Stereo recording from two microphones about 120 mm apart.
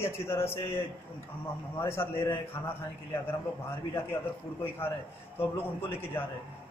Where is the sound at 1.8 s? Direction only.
20° left (ahead or behind).